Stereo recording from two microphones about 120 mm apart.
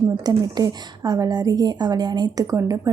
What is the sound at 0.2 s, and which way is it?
A woman's voice, 35° right (ahead or behind).